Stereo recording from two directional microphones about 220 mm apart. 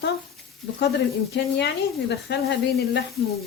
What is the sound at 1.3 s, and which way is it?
Speech, 50° left (ahead or behind).